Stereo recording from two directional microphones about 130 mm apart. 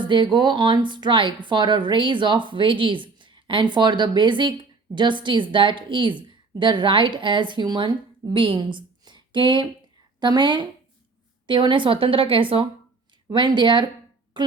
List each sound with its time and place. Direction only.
0.0 s a woman's voice: 35° right (ahead or behind)